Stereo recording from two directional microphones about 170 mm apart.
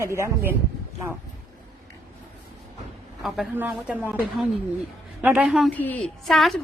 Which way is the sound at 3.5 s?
5° right (ahead or behind).